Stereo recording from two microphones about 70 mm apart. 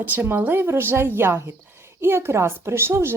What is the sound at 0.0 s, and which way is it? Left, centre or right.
A woman's voice, right.